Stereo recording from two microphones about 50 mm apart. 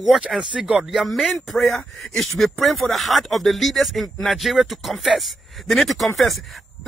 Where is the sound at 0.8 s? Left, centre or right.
Centre.